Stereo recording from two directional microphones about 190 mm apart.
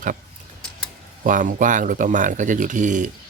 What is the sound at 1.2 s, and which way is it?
Speech, 45° right (ahead or behind).